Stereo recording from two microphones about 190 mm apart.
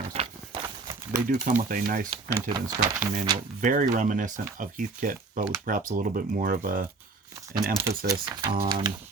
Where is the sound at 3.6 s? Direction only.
45° right (ahead or behind).